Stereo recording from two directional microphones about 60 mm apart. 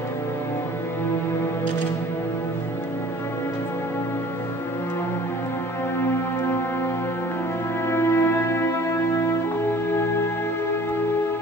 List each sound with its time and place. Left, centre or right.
7.9 s music: left